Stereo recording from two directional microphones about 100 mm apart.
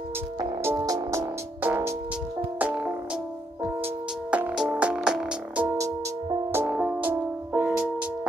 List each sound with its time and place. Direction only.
0.6 s music: 25° right (ahead or behind)